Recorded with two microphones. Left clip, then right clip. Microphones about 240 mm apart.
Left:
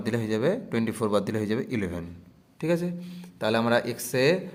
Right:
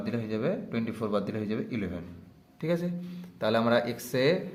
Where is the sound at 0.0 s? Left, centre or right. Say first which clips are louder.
Left 5 dB; left.